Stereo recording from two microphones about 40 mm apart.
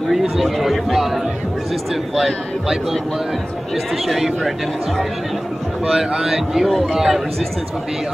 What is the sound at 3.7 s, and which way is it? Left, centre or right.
Speech, centre.